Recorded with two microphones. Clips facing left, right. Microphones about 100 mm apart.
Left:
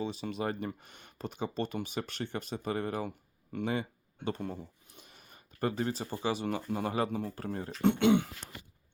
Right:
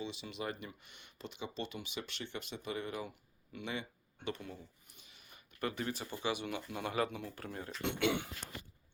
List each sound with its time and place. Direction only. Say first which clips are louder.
0.0 s speech: left 7 dB; 40° left (ahead or behind)
7.9 s speech: left 7 dB; 25° left (ahead or behind)